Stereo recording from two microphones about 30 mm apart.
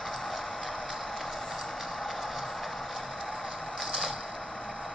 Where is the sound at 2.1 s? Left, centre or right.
Centre.